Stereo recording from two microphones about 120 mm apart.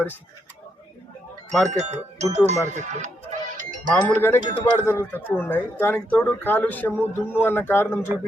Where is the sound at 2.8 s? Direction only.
85° right.